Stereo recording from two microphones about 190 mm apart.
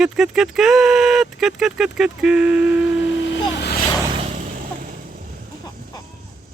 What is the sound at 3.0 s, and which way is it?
Vehicle, 60° left (ahead or behind).